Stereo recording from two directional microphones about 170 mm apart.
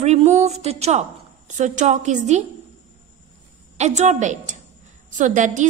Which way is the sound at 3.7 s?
40° right (ahead or behind).